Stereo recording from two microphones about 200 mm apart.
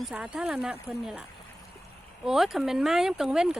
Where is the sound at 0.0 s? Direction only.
5° right (ahead or behind).